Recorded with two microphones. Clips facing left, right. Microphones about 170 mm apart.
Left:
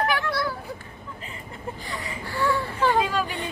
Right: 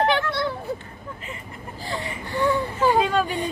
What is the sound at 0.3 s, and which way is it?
Children playing, 25° right (ahead or behind).